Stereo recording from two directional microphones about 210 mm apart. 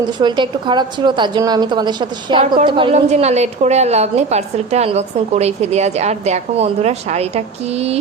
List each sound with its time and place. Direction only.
0.2 s a woman's voice: 20° right (ahead or behind)